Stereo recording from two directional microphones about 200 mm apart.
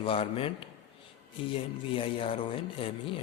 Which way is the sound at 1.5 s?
25° left (ahead or behind).